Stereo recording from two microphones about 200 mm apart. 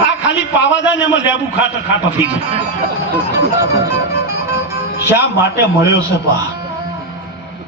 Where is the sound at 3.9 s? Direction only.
55° left (ahead or behind).